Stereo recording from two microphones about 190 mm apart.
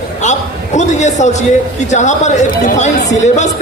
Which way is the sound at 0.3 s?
40° left (ahead or behind).